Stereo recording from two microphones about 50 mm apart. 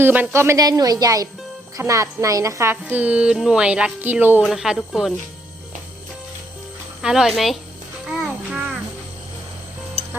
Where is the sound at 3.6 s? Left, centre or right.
Centre.